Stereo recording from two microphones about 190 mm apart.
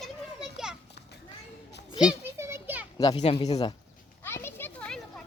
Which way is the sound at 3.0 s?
20° left (ahead or behind).